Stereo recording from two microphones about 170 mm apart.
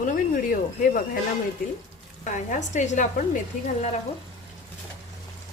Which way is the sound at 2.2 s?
45° left (ahead or behind).